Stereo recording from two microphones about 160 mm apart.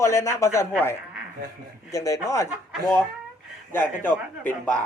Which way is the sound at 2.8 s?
Centre (ahead or behind).